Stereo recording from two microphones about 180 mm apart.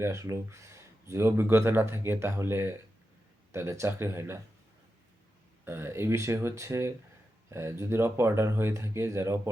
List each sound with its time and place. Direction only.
0.0 s speech: 15° right (ahead or behind)
5.6 s speech: 15° right (ahead or behind)